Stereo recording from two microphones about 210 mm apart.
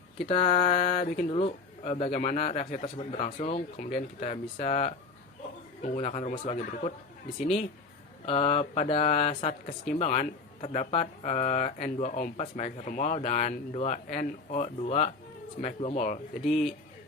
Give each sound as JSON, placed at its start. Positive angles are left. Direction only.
{"t": 0.3, "sound": "a man's voice", "side_deg": 25}
{"t": 8.3, "sound": "a man's voice", "side_deg": 30}
{"t": 16.4, "sound": "speech", "side_deg": 0}